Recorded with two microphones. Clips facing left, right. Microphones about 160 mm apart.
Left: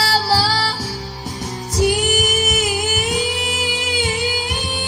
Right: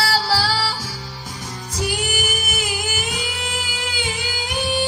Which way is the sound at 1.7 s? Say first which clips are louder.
Left 7 dB; 40° left (ahead or behind).